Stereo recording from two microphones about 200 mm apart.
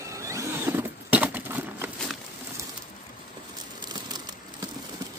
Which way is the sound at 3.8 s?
20° right (ahead or behind).